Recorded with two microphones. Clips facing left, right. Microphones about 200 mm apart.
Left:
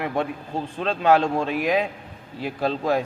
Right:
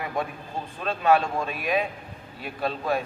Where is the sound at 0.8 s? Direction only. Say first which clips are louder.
Left 3 dB; 90° left.